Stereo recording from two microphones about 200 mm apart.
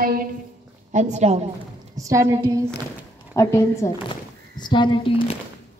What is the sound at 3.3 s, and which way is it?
A woman's voice, 15° left (ahead or behind).